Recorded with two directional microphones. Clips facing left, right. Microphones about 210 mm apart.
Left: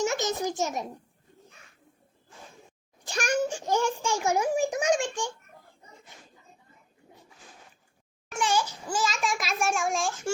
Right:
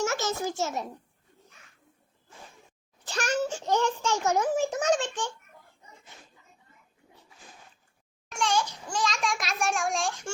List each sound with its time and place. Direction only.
0.0 s a child's voice: 15° left (ahead or behind)
3.0 s a child's voice: 10° left (ahead or behind)
8.3 s a child's voice: 5° left (ahead or behind)